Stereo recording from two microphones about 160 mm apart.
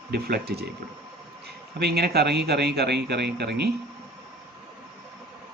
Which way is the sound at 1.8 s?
85° right.